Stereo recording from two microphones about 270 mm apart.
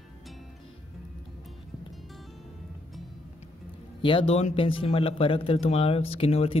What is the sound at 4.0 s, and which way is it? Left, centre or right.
Speech, centre.